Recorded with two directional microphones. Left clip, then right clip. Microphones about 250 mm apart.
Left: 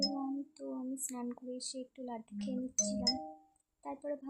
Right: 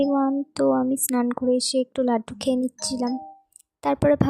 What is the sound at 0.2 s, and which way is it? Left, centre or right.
Speech, right.